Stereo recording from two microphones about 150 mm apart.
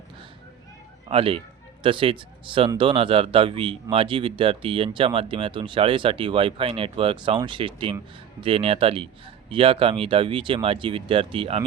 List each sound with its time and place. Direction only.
1.0 s speech: 35° right (ahead or behind)